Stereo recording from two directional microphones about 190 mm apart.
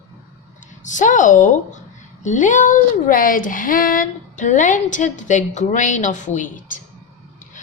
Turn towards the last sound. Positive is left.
turn(degrees=45)  # may be behind; listen again after turning